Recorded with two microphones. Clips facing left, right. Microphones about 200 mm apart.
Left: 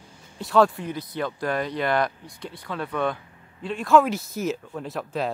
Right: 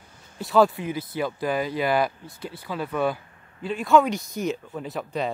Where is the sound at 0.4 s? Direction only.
Centre (ahead or behind).